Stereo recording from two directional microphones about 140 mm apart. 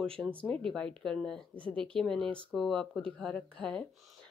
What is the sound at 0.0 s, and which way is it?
Speech, 5° left (ahead or behind).